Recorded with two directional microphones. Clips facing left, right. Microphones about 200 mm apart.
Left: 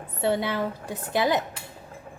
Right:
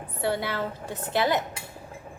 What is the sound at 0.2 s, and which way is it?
A woman's voice, 20° left (ahead or behind).